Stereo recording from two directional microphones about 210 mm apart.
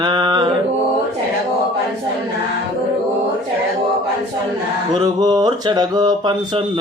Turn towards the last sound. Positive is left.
turn(degrees=-20)  # may be behind; listen again after turning